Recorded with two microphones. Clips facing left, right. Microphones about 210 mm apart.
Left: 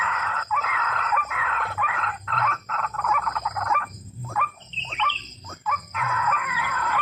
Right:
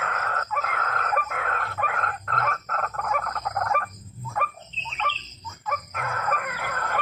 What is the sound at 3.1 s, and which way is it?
Frog, 45° right (ahead or behind).